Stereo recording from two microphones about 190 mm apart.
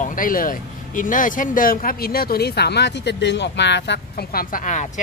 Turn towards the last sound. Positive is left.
turn(degrees=40)  # may be behind; listen again after turning